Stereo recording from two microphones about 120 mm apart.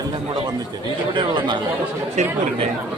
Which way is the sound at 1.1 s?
45° right (ahead or behind).